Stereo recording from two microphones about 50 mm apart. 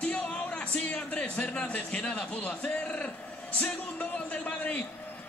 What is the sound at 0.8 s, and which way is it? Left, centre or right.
A man's voice, left.